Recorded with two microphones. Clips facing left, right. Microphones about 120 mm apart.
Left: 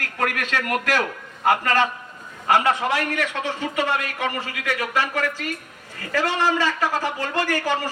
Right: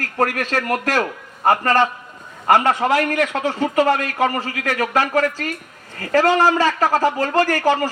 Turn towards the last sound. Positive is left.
turn(degrees=-45)  # may be behind; listen again after turning